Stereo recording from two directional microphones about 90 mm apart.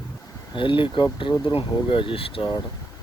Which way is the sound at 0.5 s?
65° left (ahead or behind).